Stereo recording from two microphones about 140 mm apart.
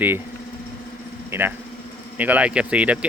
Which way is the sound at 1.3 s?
15° right (ahead or behind).